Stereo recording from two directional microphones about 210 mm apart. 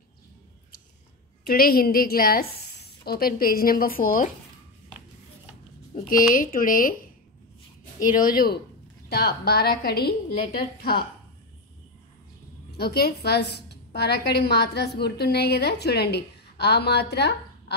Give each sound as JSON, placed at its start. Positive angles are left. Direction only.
{"t": 1.4, "sound": "a woman's voice", "side_deg": 45}
{"t": 5.9, "sound": "speech", "side_deg": 40}
{"t": 8.2, "sound": "a woman's voice", "side_deg": 45}
{"t": 12.7, "sound": "a woman's voice", "side_deg": 50}